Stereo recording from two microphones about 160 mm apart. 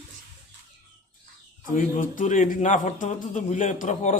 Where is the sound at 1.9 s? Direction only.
55° left (ahead or behind).